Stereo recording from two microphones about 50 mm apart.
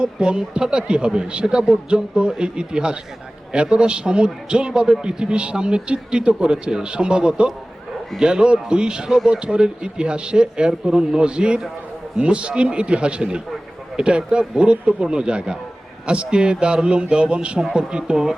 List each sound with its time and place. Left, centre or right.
0.0 s a man's voice: centre